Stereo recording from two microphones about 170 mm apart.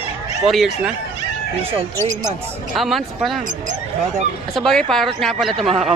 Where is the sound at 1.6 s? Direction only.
35° right (ahead or behind).